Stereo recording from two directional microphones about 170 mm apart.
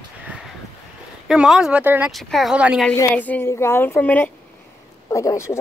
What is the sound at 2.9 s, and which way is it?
A woman's voice, 10° left (ahead or behind).